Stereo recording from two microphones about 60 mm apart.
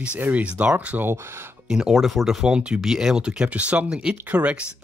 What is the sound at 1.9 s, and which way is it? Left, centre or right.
Speech, centre.